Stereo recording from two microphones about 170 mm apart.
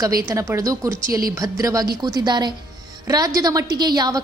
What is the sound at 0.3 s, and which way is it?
A woman's voice, 15° right (ahead or behind).